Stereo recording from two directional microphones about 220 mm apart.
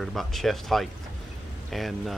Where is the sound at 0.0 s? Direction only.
Centre (ahead or behind).